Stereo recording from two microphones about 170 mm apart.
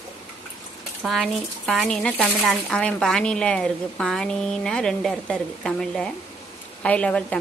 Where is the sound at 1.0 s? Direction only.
Centre (ahead or behind).